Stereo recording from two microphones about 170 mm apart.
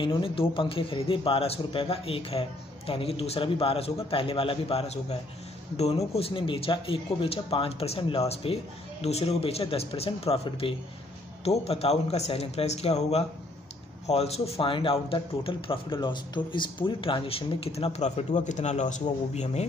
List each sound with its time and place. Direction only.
0.0 s speech: 30° left (ahead or behind)